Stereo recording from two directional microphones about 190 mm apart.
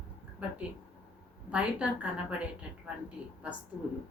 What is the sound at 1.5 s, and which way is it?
Speech, 5° right (ahead or behind).